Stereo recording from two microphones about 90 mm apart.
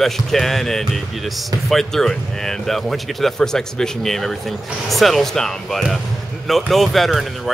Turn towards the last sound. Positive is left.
turn(degrees=0)  # may be behind; listen again after turning